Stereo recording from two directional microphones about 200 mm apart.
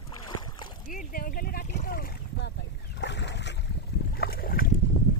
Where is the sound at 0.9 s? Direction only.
45° left (ahead or behind).